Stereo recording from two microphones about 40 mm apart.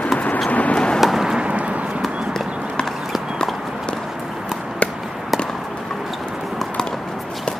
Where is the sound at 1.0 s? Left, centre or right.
Centre.